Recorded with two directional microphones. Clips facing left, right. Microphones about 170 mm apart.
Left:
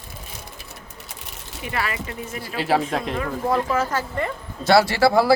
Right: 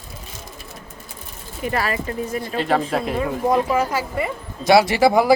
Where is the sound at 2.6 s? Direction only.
5° left (ahead or behind).